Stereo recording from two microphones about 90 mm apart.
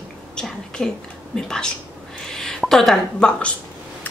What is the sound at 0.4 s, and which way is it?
A woman's voice, 5° left (ahead or behind).